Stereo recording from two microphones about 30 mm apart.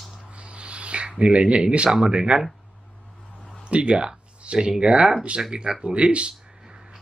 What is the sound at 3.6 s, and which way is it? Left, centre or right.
Speech, right.